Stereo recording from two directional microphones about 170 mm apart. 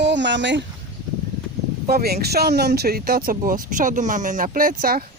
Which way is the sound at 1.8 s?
65° right (ahead or behind).